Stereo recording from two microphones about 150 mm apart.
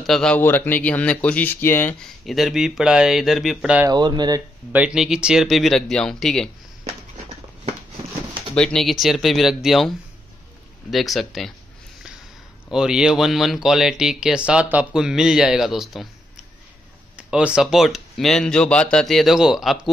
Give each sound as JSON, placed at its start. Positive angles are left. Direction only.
{"t": 0.0, "sound": "speech", "side_deg": 5}
{"t": 2.0, "sound": "speech", "side_deg": 0}
{"t": 3.9, "sound": "speech", "side_deg": -30}
{"t": 4.7, "sound": "speech", "side_deg": -5}
{"t": 8.5, "sound": "speech", "side_deg": 5}
{"t": 12.6, "sound": "speech", "side_deg": -5}
{"t": 17.3, "sound": "speech", "side_deg": -5}